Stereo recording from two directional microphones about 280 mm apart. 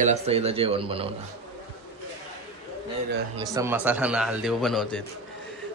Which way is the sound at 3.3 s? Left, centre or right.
Centre.